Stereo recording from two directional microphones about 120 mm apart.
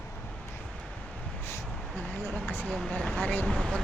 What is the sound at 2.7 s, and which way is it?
Speech, centre (ahead or behind).